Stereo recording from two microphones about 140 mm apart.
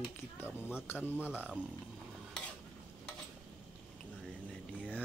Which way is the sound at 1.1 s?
10° right (ahead or behind).